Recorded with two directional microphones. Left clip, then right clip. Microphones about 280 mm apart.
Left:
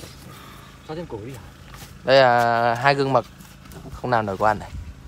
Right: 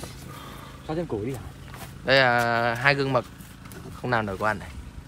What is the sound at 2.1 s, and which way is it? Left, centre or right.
Speech, centre.